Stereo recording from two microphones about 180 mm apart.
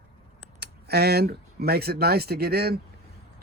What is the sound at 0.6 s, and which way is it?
Speech, 65° right (ahead or behind).